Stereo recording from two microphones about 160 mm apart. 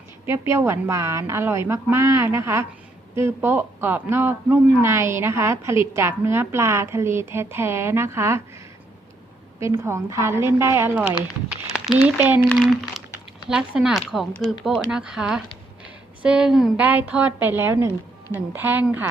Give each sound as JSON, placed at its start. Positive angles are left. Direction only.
{"t": 0.3, "sound": "a woman's voice", "side_deg": -15}
{"t": 9.6, "sound": "a woman's voice", "side_deg": -15}
{"t": 12.6, "sound": "a sound", "side_deg": -5}
{"t": 13.5, "sound": "a woman's voice", "side_deg": -5}